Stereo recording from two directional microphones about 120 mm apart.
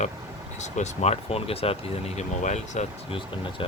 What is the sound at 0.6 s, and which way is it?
Speech, 75° left (ahead or behind).